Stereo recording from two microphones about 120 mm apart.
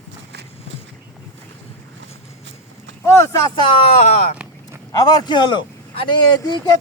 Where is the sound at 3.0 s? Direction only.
25° left (ahead or behind).